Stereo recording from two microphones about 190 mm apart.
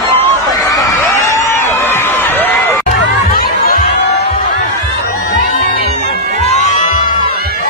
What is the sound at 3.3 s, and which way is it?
Music, 50° left (ahead or behind).